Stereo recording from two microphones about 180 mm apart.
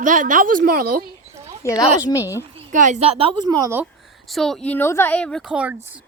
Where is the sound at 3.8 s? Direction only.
Centre (ahead or behind).